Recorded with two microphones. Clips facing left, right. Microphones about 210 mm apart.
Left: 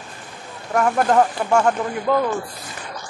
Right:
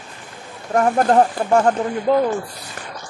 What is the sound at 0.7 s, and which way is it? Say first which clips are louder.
Speech: right 2 dB; 35° right (ahead or behind).